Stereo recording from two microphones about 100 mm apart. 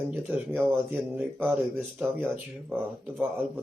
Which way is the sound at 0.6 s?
20° right (ahead or behind).